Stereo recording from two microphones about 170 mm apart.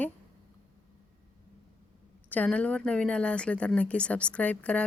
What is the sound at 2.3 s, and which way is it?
Speech, 10° left (ahead or behind).